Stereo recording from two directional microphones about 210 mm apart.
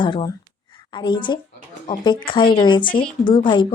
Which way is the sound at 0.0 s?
20° left (ahead or behind).